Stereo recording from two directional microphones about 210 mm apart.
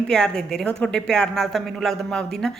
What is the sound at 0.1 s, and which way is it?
Speech, 5° left (ahead or behind).